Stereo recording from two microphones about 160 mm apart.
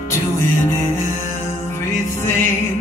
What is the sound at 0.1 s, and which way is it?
Music, 15° left (ahead or behind).